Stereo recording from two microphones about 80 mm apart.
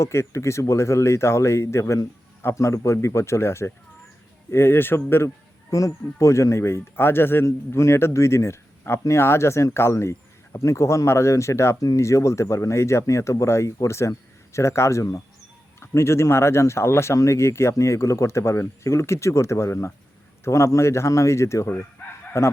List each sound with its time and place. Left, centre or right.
0.0 s a man's voice: left